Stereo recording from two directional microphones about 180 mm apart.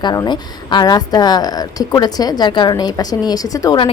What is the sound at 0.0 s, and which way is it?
A woman's voice, 25° left (ahead or behind).